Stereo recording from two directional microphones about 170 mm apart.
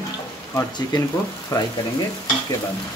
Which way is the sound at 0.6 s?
20° left (ahead or behind).